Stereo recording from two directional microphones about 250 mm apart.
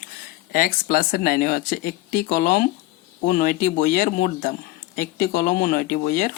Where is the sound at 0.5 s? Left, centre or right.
Left.